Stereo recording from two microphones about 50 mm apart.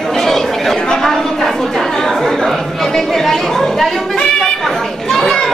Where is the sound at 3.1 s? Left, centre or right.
Centre.